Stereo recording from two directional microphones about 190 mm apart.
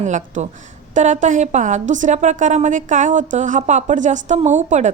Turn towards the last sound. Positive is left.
turn(degrees=-40)  # may be behind; listen again after turning